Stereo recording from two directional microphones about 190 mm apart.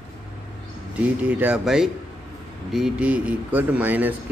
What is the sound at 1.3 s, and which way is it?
Speech, 5° right (ahead or behind).